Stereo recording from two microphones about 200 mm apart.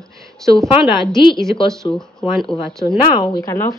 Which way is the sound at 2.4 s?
Centre (ahead or behind).